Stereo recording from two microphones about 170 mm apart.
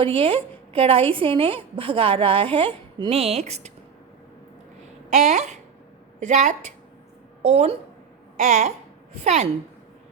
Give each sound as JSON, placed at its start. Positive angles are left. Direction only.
{"t": 0.0, "sound": "a woman's voice", "side_deg": -30}
{"t": 5.1, "sound": "a woman's voice", "side_deg": -45}